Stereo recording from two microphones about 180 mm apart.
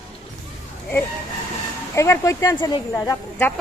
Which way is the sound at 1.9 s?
15° left (ahead or behind).